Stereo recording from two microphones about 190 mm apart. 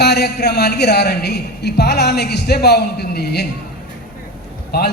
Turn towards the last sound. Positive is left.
turn(degrees=60)  # may be behind; listen again after turning